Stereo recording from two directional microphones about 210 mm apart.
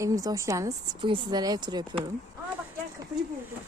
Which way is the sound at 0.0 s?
15° right (ahead or behind).